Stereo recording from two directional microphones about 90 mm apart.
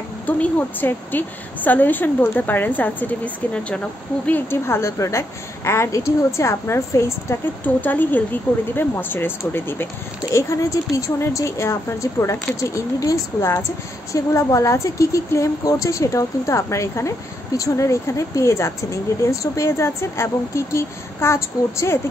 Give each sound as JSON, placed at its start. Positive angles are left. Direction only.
{"t": 0.3, "sound": "a woman's voice", "side_deg": 20}
{"t": 4.3, "sound": "speech", "side_deg": 25}
{"t": 7.6, "sound": "a woman's voice", "side_deg": 20}
{"t": 10.3, "sound": "speech", "side_deg": 35}